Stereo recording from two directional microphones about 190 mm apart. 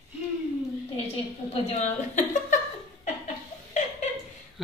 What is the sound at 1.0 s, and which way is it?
A woman's voice, 35° left (ahead or behind).